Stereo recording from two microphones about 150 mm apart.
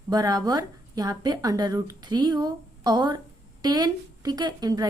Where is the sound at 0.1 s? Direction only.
25° right (ahead or behind).